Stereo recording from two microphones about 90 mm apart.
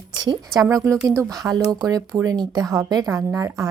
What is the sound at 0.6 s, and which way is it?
Speech, 40° right (ahead or behind).